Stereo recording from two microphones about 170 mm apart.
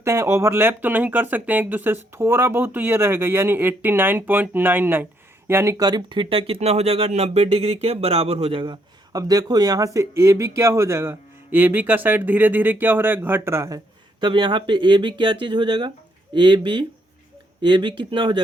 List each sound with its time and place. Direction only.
0.0 s speech: 15° right (ahead or behind)